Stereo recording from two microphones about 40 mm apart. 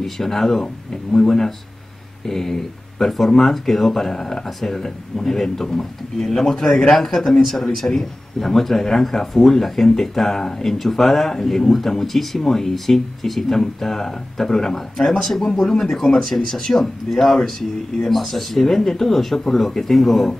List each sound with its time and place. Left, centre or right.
0.0 s speech: centre